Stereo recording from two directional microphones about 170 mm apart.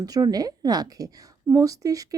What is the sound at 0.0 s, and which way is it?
Speech, 20° right (ahead or behind).